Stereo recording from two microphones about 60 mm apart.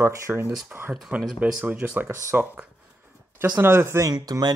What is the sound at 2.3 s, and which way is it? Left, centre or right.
Speech, right.